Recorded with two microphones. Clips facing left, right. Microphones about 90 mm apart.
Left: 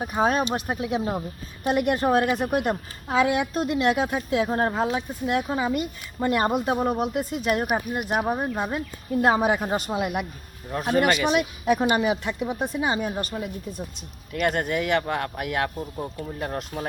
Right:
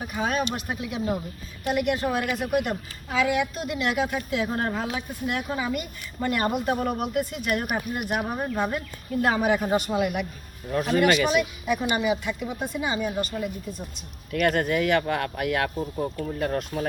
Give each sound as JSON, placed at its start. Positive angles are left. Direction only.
{"t": 0.0, "sound": "a woman's voice", "side_deg": 40}
{"t": 10.8, "sound": "a woman's voice", "side_deg": 40}
{"t": 11.3, "sound": "speech", "side_deg": 50}
{"t": 14.4, "sound": "speech", "side_deg": 15}